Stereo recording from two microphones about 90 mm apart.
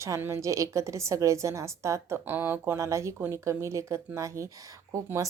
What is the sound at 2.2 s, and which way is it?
A woman's voice, 25° right (ahead or behind).